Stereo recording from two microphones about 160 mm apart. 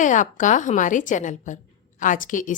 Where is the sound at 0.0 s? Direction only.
55° left (ahead or behind).